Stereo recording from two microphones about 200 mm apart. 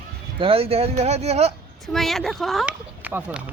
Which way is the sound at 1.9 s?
Centre (ahead or behind).